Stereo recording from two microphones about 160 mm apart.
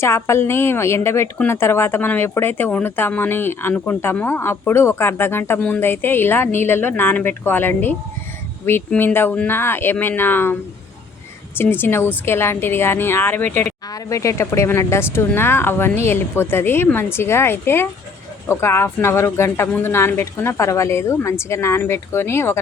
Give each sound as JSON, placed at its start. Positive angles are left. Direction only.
{"t": 0.0, "sound": "a woman's voice", "side_deg": 15}